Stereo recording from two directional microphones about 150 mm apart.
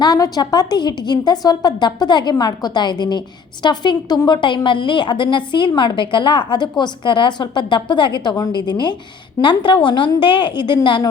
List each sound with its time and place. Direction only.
0.0 s a woman's voice: 25° left (ahead or behind)